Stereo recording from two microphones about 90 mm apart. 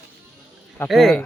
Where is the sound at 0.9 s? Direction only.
5° left (ahead or behind).